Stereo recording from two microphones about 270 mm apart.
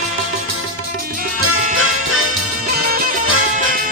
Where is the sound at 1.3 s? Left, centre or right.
Right.